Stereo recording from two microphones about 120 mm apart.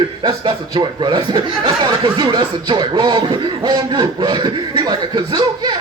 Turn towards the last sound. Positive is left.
turn(degrees=-40)  # may be behind; listen again after turning